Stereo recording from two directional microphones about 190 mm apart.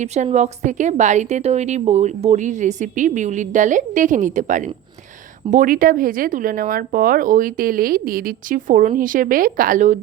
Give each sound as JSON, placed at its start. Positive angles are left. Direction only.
{"t": 0.0, "sound": "a woman's voice", "side_deg": -35}